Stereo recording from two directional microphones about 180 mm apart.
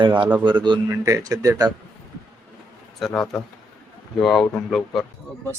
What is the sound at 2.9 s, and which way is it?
Speech, centre (ahead or behind).